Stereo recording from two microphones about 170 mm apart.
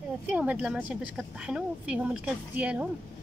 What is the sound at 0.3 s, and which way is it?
A woman's voice, 10° right (ahead or behind).